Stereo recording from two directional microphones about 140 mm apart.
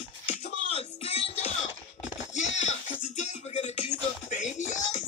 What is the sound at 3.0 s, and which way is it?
Music, 55° left (ahead or behind).